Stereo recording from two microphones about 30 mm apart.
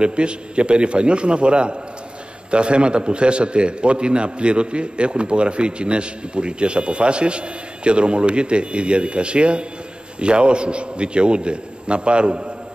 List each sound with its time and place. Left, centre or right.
0.0 s a man's voice: right